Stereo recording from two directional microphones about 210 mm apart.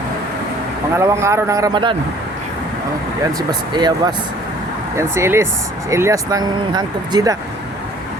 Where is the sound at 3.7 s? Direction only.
20° right (ahead or behind).